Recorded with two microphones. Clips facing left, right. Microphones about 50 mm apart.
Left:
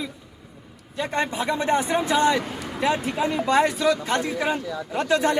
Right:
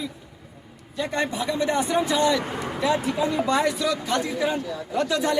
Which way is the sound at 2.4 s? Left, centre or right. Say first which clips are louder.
Right 3 dB; right.